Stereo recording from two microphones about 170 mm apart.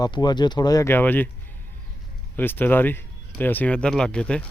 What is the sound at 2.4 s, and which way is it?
Speech, 10° left (ahead or behind).